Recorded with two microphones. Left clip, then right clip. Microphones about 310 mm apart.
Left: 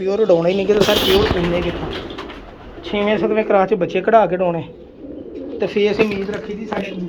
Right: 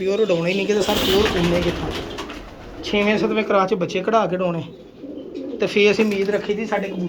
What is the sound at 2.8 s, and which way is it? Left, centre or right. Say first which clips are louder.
Speech: left 1 dB; centre.